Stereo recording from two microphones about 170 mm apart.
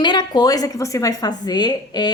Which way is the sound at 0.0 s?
25° left (ahead or behind).